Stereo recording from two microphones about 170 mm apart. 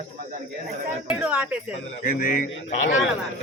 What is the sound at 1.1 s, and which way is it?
Speech, 5° right (ahead or behind).